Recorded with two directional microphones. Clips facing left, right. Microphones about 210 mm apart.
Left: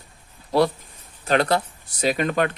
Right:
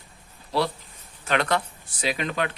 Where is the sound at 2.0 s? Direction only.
45° left (ahead or behind).